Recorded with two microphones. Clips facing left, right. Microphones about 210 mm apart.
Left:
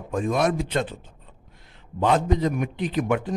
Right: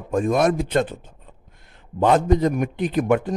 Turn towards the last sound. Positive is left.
turn(degrees=-50)  # may be behind; listen again after turning